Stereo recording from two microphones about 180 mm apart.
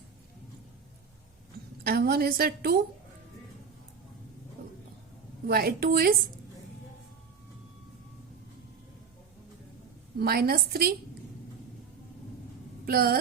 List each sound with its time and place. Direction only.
1.8 s a woman's voice: 60° right (ahead or behind)
5.5 s a woman's voice: 60° right (ahead or behind)
10.2 s a woman's voice: 60° right (ahead or behind)
12.8 s speech: 55° right (ahead or behind)